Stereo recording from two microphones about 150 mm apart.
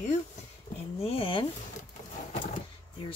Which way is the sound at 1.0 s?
40° left (ahead or behind).